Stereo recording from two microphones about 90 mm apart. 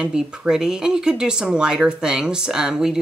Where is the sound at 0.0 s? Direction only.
10° right (ahead or behind).